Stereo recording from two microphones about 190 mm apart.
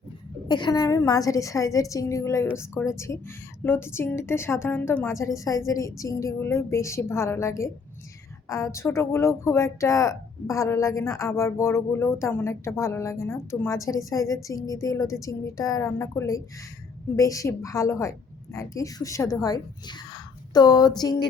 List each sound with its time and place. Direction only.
0.4 s speech: 20° left (ahead or behind)